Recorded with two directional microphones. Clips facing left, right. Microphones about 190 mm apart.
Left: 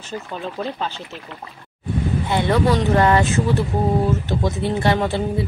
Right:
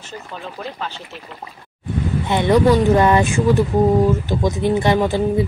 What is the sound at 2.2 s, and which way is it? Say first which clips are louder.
Speech: right 5 dB; 20° right (ahead or behind).